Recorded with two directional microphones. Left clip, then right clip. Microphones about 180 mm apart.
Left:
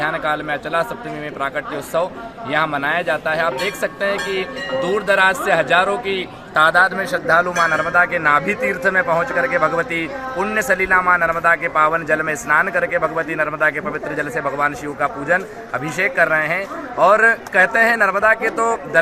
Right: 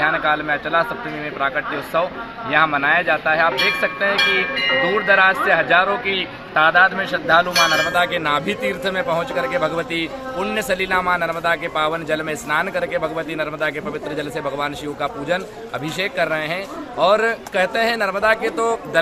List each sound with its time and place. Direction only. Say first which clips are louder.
0.0 s speech: right 2 dB; 35° left (ahead or behind)
6.5 s a man's voice: left 1 dB; 15° left (ahead or behind)
8.1 s a man's voice: left 4 dB; 5° left (ahead or behind)
10.9 s a man's voice: left 5 dB; 5° left (ahead or behind)
18.3 s speech: left 2 dB; 10° right (ahead or behind)